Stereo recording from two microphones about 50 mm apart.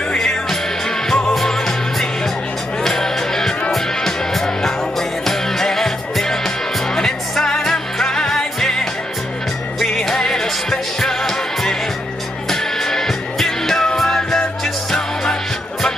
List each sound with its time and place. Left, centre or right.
0.1 s music: centre
9.8 s music: centre